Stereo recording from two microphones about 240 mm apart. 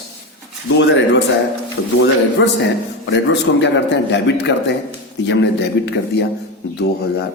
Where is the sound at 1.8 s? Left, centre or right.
Left.